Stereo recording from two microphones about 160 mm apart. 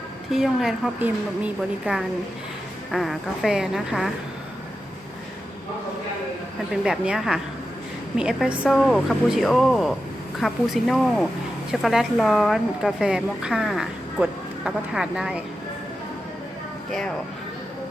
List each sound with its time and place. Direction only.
0.3 s speech: centre (ahead or behind)
6.8 s speech: 5° right (ahead or behind)